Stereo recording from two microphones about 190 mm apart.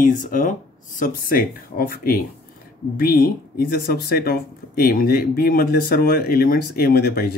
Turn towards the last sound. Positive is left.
turn(degrees=55)  # may be behind; listen again after turning